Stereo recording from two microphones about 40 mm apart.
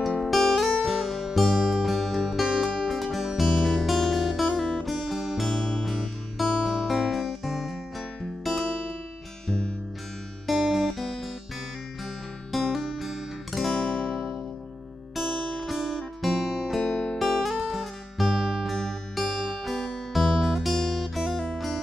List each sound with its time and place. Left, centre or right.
0.6 s music: centre
3.3 s guitar: centre
5.5 s music: centre
10.4 s guitar: centre
12.7 s guitar: centre
15.1 s music: centre
16.8 s music: centre
17.4 s music: centre